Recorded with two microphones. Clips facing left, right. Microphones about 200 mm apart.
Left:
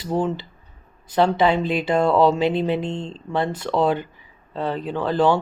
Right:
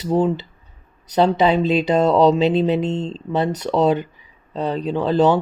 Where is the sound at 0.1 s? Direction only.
15° right (ahead or behind).